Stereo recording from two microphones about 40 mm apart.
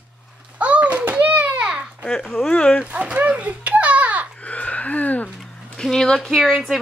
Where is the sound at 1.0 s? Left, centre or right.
Right.